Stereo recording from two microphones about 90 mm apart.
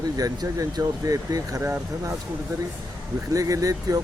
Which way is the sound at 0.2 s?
40° right (ahead or behind).